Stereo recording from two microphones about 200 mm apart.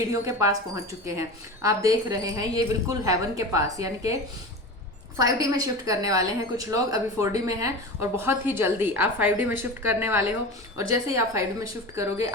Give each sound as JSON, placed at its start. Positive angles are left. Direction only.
{"t": 0.1, "sound": "a woman's voice", "side_deg": -15}
{"t": 1.6, "sound": "a woman's voice", "side_deg": -15}
{"t": 5.1, "sound": "a woman's voice", "side_deg": -15}